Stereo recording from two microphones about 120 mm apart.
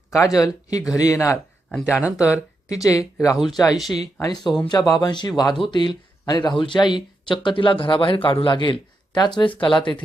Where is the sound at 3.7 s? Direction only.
Centre (ahead or behind).